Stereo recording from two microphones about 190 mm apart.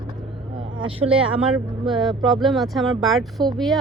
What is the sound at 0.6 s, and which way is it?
Vehicle, 30° right (ahead or behind).